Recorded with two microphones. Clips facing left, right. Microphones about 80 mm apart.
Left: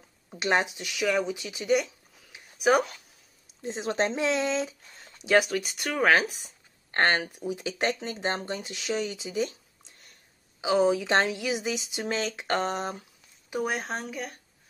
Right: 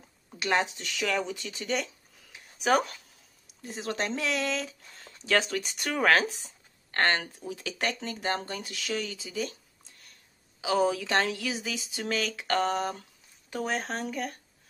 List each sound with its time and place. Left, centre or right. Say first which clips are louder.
0.4 s speech: left 2 dB; left
0.7 s speech: left 3 dB; centre
2.3 s a sound: left 2 dB; centre
3.6 s speech: left 5 dB; left; by 14.3 s centre